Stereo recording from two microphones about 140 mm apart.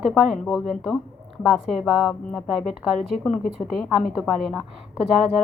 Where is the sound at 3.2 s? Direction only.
Centre (ahead or behind).